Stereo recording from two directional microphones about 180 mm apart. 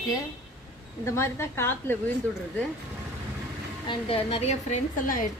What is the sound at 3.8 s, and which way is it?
A woman's voice, 30° left (ahead or behind).